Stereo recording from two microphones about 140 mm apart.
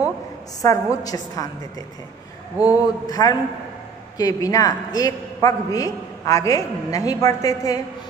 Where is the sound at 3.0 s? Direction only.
25° left (ahead or behind).